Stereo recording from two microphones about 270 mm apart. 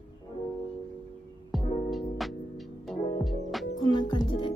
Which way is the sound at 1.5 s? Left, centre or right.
Centre.